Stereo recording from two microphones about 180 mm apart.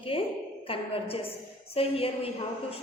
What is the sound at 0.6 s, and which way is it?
A woman's voice, 30° left (ahead or behind).